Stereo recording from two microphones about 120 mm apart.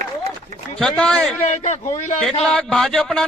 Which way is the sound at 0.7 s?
5° left (ahead or behind).